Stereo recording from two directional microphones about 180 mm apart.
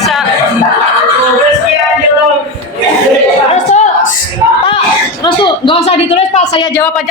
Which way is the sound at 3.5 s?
40° left (ahead or behind).